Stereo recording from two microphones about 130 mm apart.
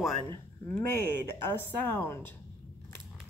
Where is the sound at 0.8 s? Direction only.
20° left (ahead or behind).